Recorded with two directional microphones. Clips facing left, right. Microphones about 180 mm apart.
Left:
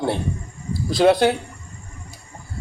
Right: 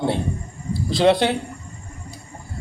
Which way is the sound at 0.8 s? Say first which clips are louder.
Left 1 dB; 25° right (ahead or behind).